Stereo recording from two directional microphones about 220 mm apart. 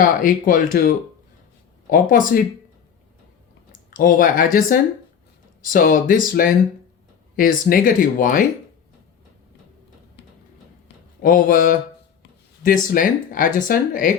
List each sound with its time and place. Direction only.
0.0 s speech: 40° left (ahead or behind)
3.7 s speech: 40° left (ahead or behind)
11.2 s speech: 40° left (ahead or behind)